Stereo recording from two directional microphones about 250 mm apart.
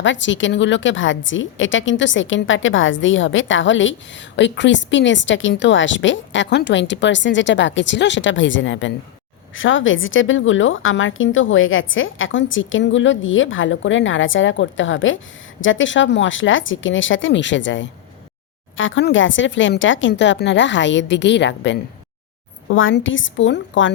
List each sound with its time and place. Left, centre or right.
0.0 s a woman's voice: left